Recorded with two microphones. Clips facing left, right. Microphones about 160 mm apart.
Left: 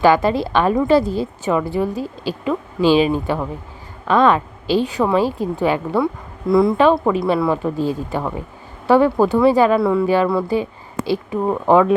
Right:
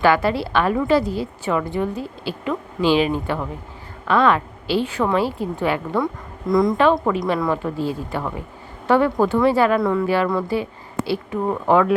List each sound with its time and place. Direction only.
0.0 s a woman's voice: 20° left (ahead or behind)
0.7 s a woman's voice: 30° left (ahead or behind)